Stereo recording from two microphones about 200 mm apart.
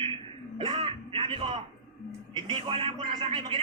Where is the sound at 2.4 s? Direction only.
25° right (ahead or behind).